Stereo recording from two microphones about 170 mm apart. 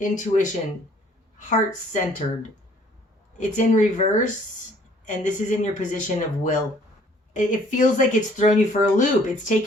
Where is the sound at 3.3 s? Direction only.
45° left (ahead or behind).